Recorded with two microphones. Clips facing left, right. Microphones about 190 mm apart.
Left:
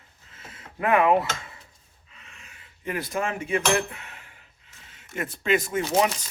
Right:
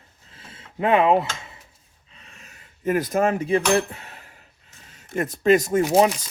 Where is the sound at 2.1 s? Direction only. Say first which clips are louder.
Right 2 dB; 35° right (ahead or behind).